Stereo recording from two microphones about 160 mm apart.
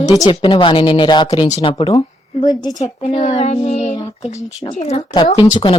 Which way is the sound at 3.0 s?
40° left (ahead or behind).